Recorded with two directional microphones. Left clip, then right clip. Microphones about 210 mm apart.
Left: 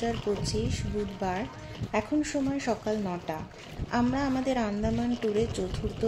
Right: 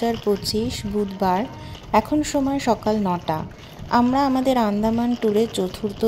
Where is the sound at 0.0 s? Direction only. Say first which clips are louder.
Right 8 dB; 40° right (ahead or behind).